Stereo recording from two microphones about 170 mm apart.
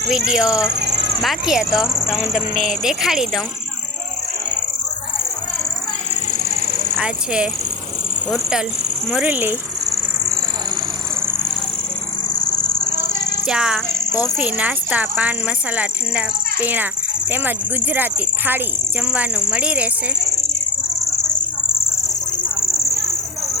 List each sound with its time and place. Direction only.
0.1 s speech: 5° right (ahead or behind)
6.3 s a sound: 60° right (ahead or behind)
6.9 s speech: 5° right (ahead or behind)
10.2 s vehicle: 20° right (ahead or behind)
13.5 s speech: 5° right (ahead or behind)